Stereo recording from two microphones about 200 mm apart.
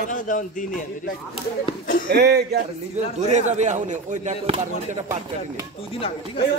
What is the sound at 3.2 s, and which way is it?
Speech, 35° right (ahead or behind).